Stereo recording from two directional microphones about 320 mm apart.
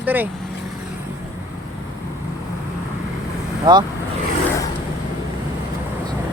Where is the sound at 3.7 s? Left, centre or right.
Centre.